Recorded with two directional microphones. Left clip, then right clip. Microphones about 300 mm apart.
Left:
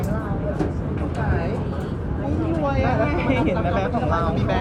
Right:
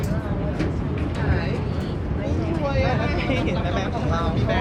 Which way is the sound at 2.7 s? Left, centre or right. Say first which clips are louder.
Left 2 dB; left.